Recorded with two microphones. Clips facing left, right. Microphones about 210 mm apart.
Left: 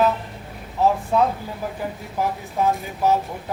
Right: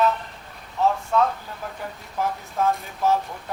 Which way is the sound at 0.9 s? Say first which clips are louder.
Left 2 dB; 15° left (ahead or behind).